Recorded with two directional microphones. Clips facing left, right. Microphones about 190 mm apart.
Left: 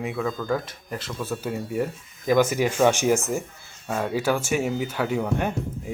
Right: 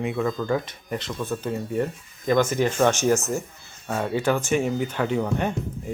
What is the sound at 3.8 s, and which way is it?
Speech, centre (ahead or behind).